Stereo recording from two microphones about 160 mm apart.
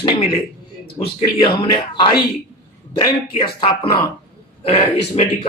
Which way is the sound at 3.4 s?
35° left (ahead or behind).